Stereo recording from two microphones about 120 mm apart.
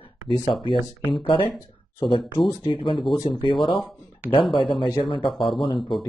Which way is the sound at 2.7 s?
45° left (ahead or behind).